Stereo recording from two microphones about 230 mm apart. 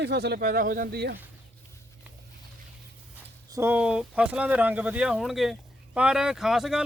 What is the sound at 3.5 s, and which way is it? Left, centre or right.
Speech, centre.